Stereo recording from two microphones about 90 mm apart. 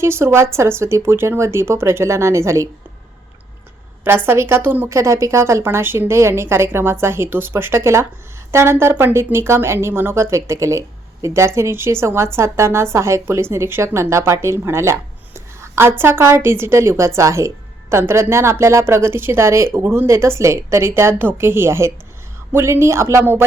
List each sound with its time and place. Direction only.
0.0 s speech: 30° right (ahead or behind)
4.0 s speech: 25° right (ahead or behind)
4.9 s speech: 35° right (ahead or behind)